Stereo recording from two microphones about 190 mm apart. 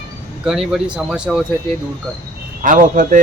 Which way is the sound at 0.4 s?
Centre (ahead or behind).